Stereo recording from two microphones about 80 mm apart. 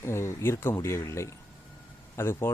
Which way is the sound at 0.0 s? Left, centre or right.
Left.